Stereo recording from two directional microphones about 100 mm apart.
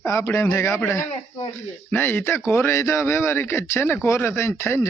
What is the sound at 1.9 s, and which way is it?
Speech, 20° left (ahead or behind).